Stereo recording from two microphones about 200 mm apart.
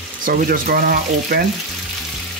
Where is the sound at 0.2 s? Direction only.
45° right (ahead or behind).